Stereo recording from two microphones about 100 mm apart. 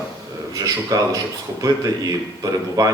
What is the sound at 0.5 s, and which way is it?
Speech, 35° right (ahead or behind).